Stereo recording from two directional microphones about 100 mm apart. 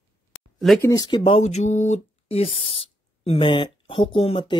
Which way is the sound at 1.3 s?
90° left.